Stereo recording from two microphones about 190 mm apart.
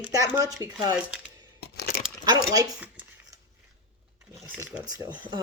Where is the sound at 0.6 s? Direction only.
20° right (ahead or behind).